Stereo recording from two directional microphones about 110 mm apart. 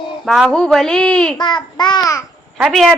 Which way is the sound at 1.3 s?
45° left (ahead or behind).